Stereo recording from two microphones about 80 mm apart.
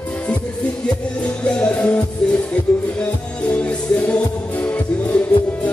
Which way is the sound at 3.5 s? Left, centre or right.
Centre.